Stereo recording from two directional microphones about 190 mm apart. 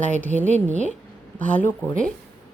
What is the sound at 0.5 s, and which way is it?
Speech, 40° right (ahead or behind).